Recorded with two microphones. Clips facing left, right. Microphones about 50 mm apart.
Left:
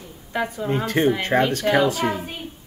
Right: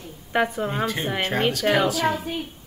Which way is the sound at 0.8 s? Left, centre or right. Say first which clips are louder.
Left 7 dB; left.